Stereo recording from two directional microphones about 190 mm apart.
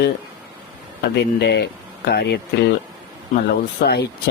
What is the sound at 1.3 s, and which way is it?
Speech, 60° left (ahead or behind).